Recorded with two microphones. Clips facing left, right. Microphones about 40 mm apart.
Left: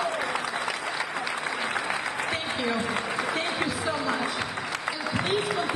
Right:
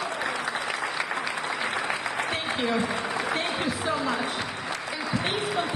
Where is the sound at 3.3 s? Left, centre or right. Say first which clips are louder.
Even; right.